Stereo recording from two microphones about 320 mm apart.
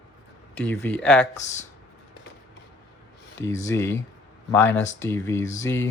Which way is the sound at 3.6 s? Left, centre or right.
Centre.